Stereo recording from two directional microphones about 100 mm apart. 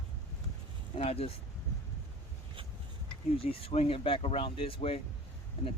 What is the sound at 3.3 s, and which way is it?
Speech, 75° left (ahead or behind).